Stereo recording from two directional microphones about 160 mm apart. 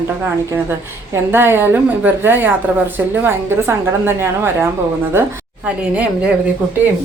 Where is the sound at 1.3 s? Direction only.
15° right (ahead or behind).